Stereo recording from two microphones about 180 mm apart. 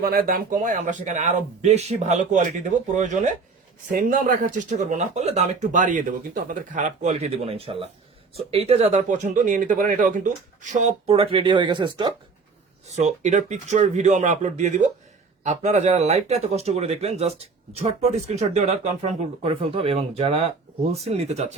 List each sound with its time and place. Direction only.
0.0 s speech: 55° right (ahead or behind); by 12.1 s 25° right (ahead or behind)
13.0 s speech: 40° right (ahead or behind)